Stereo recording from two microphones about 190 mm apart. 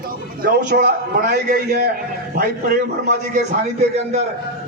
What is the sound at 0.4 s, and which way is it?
A man's voice, 55° right (ahead or behind).